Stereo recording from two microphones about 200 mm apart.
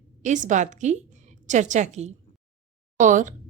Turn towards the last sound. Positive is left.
turn(degrees=-40)  # may be behind; listen again after turning